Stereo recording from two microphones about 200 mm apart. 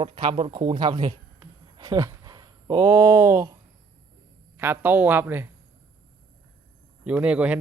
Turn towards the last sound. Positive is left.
turn(degrees=-5)  # may be behind; listen again after turning